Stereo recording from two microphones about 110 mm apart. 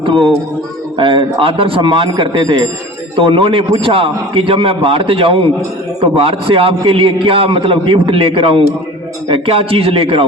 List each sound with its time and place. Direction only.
0.0 s a man's voice: 50° right (ahead or behind)